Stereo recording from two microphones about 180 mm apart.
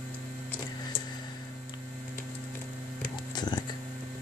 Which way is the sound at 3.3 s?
25° left (ahead or behind).